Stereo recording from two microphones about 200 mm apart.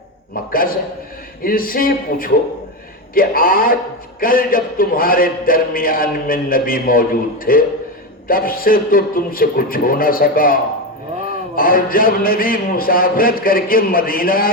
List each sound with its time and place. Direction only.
0.5 s speech: 45° left (ahead or behind)